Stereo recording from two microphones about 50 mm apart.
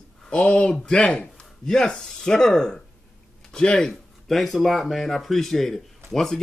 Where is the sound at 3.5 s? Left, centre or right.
Centre.